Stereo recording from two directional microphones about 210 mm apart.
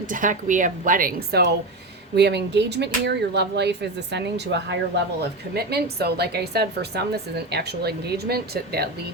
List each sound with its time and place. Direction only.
0.1 s a woman's voice: 40° right (ahead or behind)